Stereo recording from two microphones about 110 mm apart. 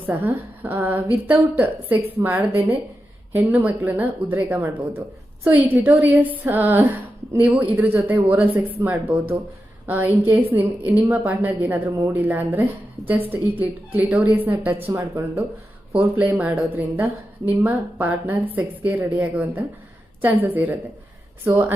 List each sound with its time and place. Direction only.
0.0 s speech: 20° right (ahead or behind)